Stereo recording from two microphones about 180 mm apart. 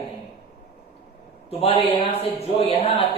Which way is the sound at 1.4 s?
35° left (ahead or behind).